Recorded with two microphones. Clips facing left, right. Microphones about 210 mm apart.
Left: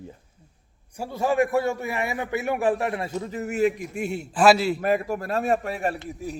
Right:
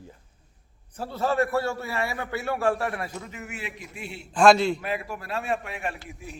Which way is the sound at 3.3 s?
35° left (ahead or behind).